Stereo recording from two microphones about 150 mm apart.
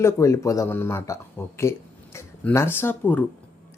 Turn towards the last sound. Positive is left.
turn(degrees=15)  # may be behind; listen again after turning